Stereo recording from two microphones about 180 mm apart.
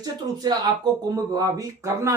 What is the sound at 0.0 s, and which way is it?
Speech, 20° right (ahead or behind).